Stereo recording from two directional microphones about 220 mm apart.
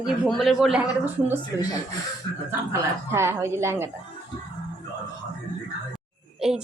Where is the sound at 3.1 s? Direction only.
10° right (ahead or behind).